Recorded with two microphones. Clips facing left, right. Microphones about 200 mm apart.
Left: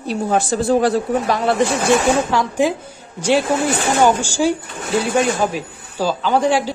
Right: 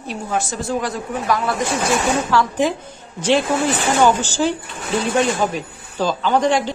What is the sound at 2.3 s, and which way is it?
Speech, 10° left (ahead or behind).